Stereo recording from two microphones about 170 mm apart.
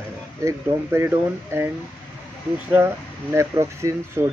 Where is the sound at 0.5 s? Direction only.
15° right (ahead or behind).